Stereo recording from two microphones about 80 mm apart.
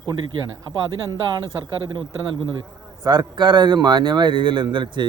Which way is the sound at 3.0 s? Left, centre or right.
Right.